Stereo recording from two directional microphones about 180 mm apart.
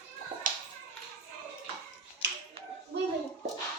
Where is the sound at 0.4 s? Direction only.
50° right (ahead or behind).